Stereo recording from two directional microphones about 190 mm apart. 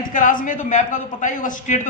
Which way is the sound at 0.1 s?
45° left (ahead or behind).